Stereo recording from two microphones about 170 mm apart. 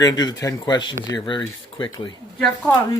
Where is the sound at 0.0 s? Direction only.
25° left (ahead or behind).